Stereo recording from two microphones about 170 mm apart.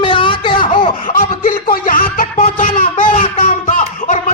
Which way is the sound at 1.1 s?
60° left (ahead or behind).